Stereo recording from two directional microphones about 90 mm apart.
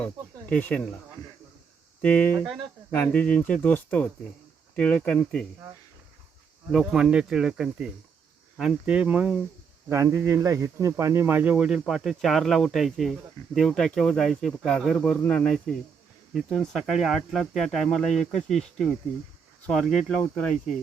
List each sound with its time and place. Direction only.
0.6 s speech: 15° left (ahead or behind)
2.0 s speech: 15° left (ahead or behind)
6.7 s speech: 5° right (ahead or behind)
9.9 s speech: 30° right (ahead or behind)
11.5 s speech: 5° right (ahead or behind)